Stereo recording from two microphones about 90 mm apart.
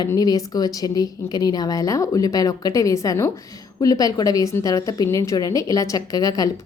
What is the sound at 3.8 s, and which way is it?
A woman's voice, 45° left (ahead or behind).